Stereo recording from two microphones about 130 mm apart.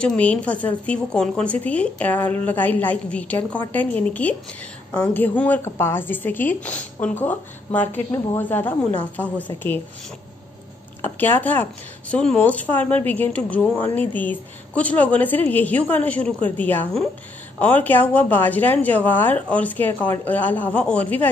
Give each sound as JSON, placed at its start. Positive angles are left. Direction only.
{"t": 0.0, "sound": "a woman's voice", "side_deg": 10}
{"t": 11.0, "sound": "a woman's voice", "side_deg": 15}